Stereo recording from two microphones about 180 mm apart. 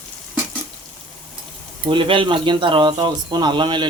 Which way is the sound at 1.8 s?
30° right (ahead or behind).